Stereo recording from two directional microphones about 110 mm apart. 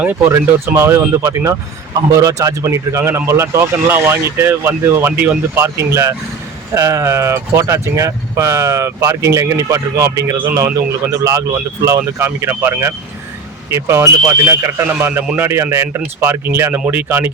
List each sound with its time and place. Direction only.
0.3 s speech: 25° right (ahead or behind)